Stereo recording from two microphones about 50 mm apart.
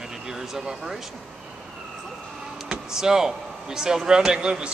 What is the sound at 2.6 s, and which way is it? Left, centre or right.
Speech, centre.